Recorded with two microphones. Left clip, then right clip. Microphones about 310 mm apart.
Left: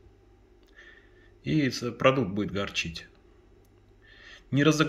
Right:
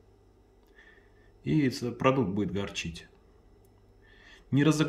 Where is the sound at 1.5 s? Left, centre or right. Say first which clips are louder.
Left 1 dB; centre.